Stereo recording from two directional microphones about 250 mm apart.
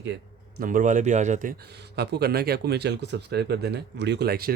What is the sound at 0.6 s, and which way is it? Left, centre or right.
Speech, right.